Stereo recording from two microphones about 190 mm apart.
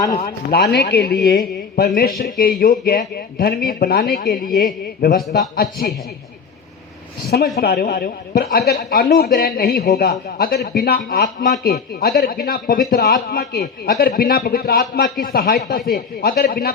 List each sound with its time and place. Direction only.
0.5 s a man's voice: 60° left (ahead or behind)
7.3 s a man's voice: 55° left (ahead or behind)